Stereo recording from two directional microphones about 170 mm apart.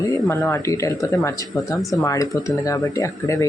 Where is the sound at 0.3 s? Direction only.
15° left (ahead or behind).